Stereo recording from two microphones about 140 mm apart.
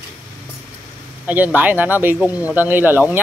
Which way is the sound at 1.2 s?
10° right (ahead or behind).